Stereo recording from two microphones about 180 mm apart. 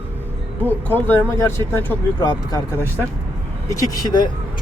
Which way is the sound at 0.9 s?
10° left (ahead or behind).